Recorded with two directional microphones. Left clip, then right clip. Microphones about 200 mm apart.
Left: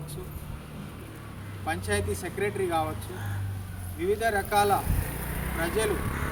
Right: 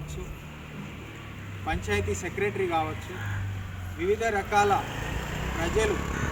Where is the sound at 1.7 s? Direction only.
Centre (ahead or behind).